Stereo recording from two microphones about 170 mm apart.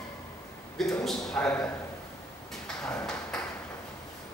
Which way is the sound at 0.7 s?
Centre (ahead or behind).